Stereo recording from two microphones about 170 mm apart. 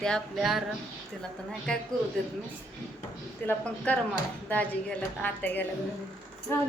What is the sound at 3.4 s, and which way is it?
A woman's voice, 10° left (ahead or behind).